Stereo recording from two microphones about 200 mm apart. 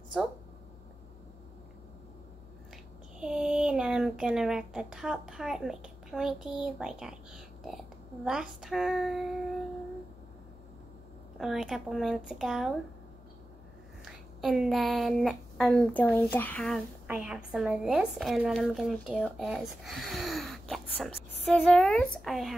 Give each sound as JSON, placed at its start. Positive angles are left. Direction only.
{"t": 3.2, "sound": "speech", "side_deg": -5}
{"t": 11.3, "sound": "speech", "side_deg": 0}
{"t": 14.0, "sound": "speech", "side_deg": 0}